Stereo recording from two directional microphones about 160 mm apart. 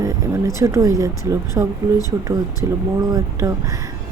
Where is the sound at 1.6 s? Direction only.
20° right (ahead or behind).